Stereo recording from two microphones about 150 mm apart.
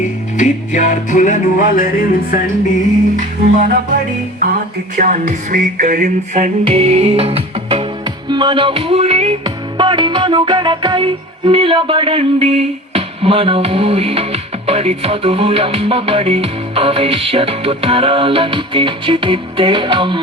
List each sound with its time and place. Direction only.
0.0 s music: 55° left (ahead or behind)
4.9 s music: 55° right (ahead or behind)
6.7 s music: 40° right (ahead or behind)
9.4 s music: 30° right (ahead or behind)